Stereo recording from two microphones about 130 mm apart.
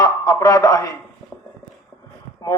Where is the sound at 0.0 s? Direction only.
25° left (ahead or behind).